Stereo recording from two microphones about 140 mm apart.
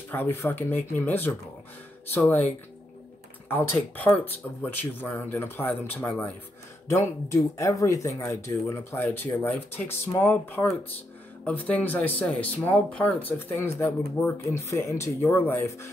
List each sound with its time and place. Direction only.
0.1 s speech: 15° left (ahead or behind)
6.9 s speech: 20° left (ahead or behind)